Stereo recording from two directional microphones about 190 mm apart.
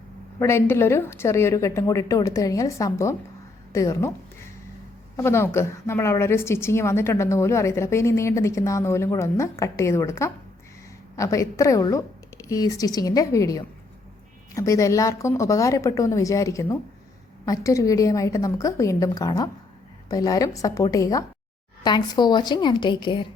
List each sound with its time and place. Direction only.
0.3 s a woman's voice: 15° left (ahead or behind)
5.1 s a woman's voice: 15° left (ahead or behind)